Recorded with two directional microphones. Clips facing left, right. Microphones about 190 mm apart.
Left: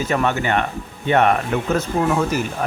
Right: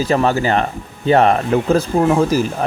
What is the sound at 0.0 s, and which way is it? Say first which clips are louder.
Speech: right 4 dB; 35° right (ahead or behind).